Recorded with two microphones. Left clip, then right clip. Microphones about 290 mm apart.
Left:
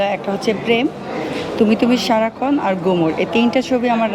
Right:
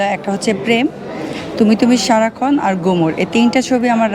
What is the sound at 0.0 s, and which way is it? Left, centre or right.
Speech, right.